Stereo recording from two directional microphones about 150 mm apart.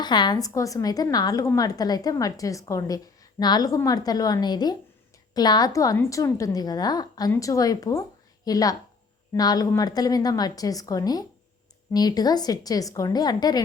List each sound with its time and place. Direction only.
0.0 s a woman's voice: 30° left (ahead or behind)